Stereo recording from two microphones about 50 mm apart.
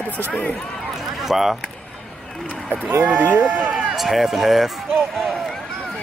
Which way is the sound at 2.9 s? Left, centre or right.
Right.